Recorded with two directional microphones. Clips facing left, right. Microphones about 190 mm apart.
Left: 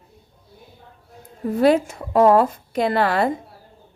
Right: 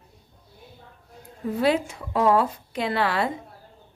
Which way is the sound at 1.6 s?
45° left (ahead or behind).